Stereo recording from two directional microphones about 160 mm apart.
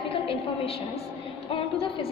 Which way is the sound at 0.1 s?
35° left (ahead or behind).